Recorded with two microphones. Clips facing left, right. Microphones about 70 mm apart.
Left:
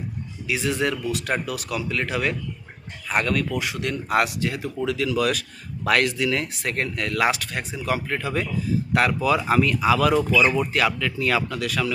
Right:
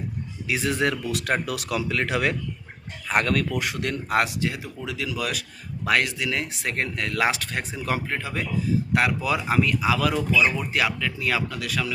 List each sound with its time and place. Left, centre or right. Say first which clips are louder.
0.4 s speech: even; right
1.1 s speech: even; right
3.1 s speech: even; right
4.1 s speech: left 2 dB; right
4.9 s speech: left 6 dB; centre; by 8.1 s right
8.1 s speech: left 2 dB; centre
10.7 s speech: left 2 dB; centre